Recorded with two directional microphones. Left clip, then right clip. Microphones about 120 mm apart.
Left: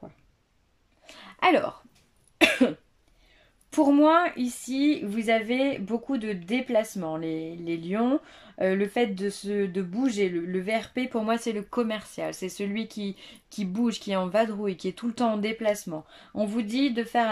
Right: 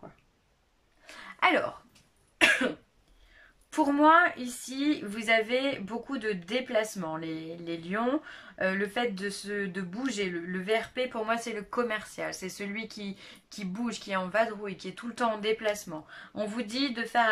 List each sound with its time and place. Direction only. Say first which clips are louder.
1.0 s throat clearing: left 3 dB; 25° left (ahead or behind)
2.3 s cough: left 2 dB; 40° left (ahead or behind)
3.7 s a woman's voice: left 2 dB; 25° left (ahead or behind)